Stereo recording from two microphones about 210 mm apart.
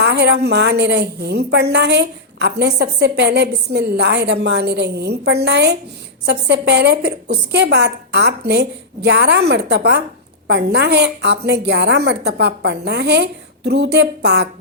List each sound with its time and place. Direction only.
0.0 s a woman's voice: 55° right (ahead or behind)